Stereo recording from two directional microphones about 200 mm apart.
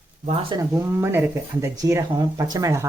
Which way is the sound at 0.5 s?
15° right (ahead or behind).